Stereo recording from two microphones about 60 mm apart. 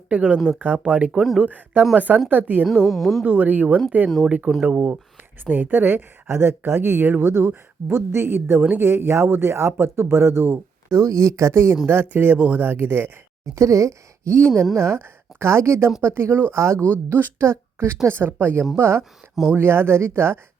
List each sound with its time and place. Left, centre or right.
0.1 s speech: right
1.1 s speech: centre
1.4 s speech: right
2.8 s speech: centre
3.2 s speech: right
4.6 s speech: right
6.2 s speech: right
10.9 s speech: right
11.9 s speech: right
13.4 s speech: right
14.5 s speech: centre
14.8 s speech: right
17.1 s speech: right
17.4 s a woman's voice: right